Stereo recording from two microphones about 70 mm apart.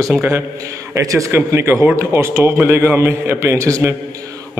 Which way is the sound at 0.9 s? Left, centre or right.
Right.